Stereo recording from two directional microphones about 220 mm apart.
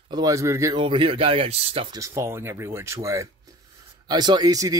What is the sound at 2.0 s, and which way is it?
Speech, 15° right (ahead or behind).